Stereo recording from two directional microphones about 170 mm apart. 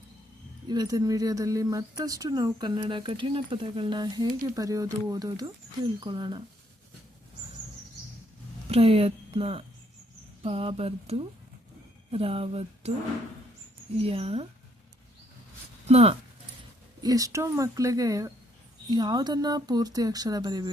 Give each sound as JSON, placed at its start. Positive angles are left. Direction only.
{"t": 0.7, "sound": "speech", "side_deg": -25}
{"t": 8.7, "sound": "speech", "side_deg": -35}
{"t": 14.0, "sound": "speech", "side_deg": -35}
{"t": 15.9, "sound": "speech", "side_deg": -35}
{"t": 17.0, "sound": "speech", "side_deg": -20}